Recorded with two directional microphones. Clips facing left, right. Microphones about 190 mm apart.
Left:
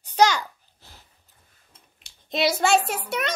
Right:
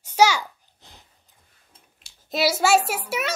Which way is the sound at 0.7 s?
20° right (ahead or behind).